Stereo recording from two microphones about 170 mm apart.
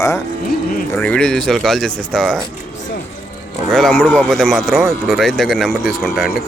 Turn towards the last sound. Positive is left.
turn(degrees=0)  # may be behind; listen again after turning